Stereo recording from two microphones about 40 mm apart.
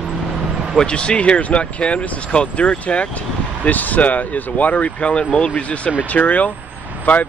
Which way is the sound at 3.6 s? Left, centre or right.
Left.